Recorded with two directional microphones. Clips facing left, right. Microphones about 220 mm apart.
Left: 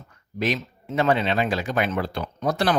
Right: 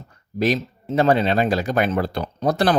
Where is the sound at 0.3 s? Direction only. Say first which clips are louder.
Right 5 dB; 35° right (ahead or behind).